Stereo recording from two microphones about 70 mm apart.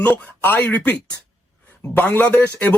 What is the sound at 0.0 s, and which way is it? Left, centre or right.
Speech, left.